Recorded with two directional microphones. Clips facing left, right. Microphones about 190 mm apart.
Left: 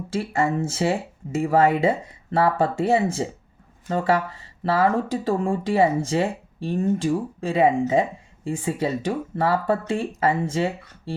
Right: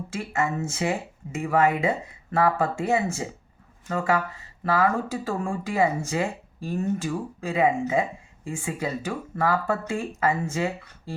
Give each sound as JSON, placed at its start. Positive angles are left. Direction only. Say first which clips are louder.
{"t": 0.1, "sound": "speech", "louder": "left 5 dB", "side_deg": 30}